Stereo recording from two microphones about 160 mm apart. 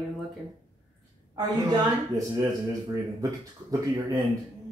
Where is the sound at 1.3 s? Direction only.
25° right (ahead or behind).